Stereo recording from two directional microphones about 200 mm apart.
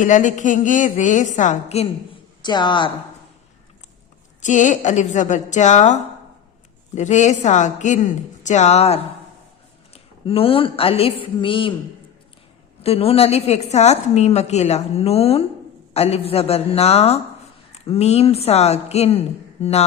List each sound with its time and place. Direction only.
0.0 s a woman's voice: 40° left (ahead or behind)
2.4 s speech: 20° left (ahead or behind)
4.4 s a woman's voice: 40° left (ahead or behind)
12.8 s a woman's voice: 30° left (ahead or behind)